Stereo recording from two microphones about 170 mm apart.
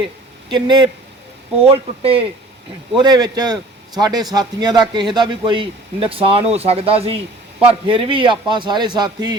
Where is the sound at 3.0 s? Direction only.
25° right (ahead or behind).